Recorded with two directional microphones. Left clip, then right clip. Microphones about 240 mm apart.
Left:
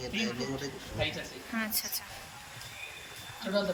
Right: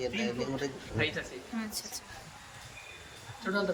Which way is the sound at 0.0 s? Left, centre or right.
Right.